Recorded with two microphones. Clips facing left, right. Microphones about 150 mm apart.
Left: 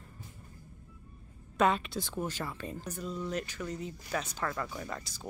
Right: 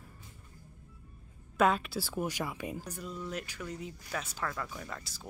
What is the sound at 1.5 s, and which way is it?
Speech, centre (ahead or behind).